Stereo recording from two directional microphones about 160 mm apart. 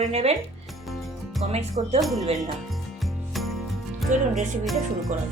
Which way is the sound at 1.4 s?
40° right (ahead or behind).